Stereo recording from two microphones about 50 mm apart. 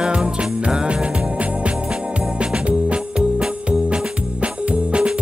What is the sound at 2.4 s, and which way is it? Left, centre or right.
Music, right.